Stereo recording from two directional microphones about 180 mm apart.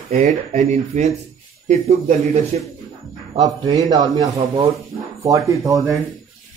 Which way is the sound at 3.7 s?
20° right (ahead or behind).